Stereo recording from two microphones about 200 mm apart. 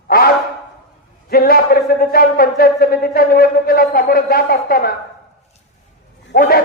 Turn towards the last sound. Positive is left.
turn(degrees=50)  # may be behind; listen again after turning